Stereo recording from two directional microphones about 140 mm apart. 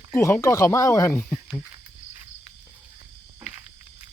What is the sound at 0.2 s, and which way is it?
Speech, 20° left (ahead or behind).